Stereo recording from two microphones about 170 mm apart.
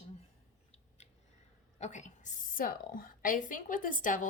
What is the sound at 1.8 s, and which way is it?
A woman's voice, 45° left (ahead or behind).